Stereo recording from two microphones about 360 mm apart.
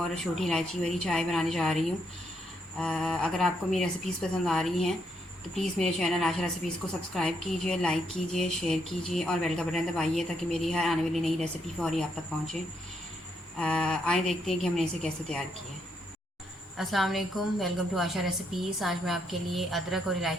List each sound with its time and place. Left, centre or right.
0.2 s speech: centre
13.6 s speech: centre
16.7 s speech: centre